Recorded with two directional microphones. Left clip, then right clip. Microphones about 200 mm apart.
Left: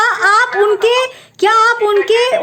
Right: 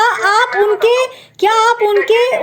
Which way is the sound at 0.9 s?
20° left (ahead or behind).